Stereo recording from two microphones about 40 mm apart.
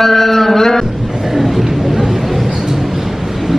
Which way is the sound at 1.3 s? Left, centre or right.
Centre.